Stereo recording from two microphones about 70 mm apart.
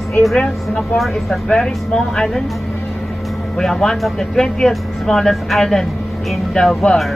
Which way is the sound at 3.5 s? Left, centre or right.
Centre.